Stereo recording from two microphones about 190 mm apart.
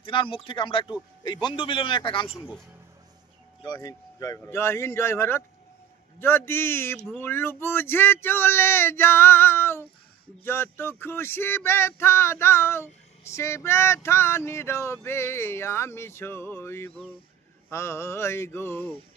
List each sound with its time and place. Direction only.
0.0 s a man's voice: 25° left (ahead or behind)
2.3 s a man's voice: centre (ahead or behind)
3.7 s a sound: 20° left (ahead or behind)